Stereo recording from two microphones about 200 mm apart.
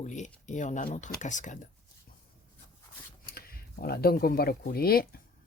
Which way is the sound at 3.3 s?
50° left (ahead or behind).